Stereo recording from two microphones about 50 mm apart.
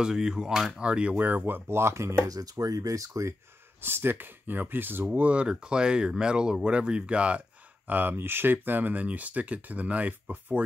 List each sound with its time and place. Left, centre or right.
0.0 s speech: centre
0.7 s speech: right
1.2 s speech: right
2.6 s speech: right
3.8 s speech: right
5.0 s speech: right